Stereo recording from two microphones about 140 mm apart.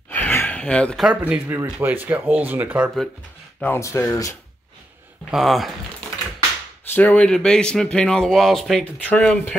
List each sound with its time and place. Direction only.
0.1 s gasp: 15° left (ahead or behind)
1.0 s speech: 10° right (ahead or behind)
3.6 s speech: 20° left (ahead or behind)
5.3 s speech: centre (ahead or behind)
6.9 s speech: 10° left (ahead or behind)